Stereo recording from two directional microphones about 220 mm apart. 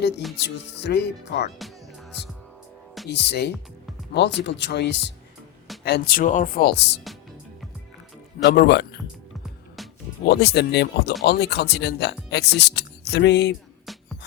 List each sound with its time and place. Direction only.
0.4 s speech: 50° left (ahead or behind)
3.1 s speech: 50° left (ahead or behind)
8.4 s speech: 45° left (ahead or behind)
10.2 s speech: 45° left (ahead or behind)